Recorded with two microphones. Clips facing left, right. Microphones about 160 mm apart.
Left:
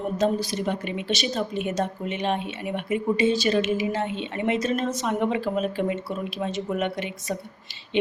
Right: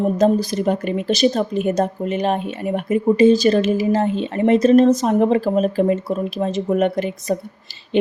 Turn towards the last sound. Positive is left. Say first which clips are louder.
# right 7 dB
turn(degrees=-40)  # may be behind; listen again after turning